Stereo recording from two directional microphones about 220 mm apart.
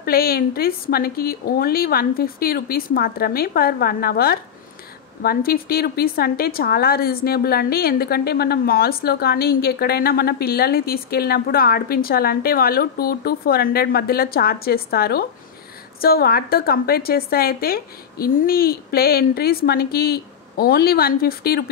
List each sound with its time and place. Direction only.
0.0 s a woman's voice: 45° left (ahead or behind)